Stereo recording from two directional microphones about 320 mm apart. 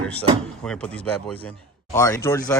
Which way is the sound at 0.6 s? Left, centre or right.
Centre.